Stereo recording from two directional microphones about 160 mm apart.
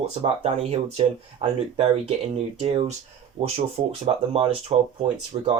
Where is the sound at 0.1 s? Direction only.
40° right (ahead or behind).